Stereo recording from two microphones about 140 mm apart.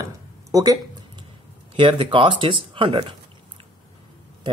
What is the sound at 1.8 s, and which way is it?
Speech, 35° right (ahead or behind).